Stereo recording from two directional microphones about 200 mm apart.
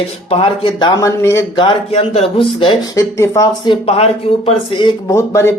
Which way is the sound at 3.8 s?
30° left (ahead or behind).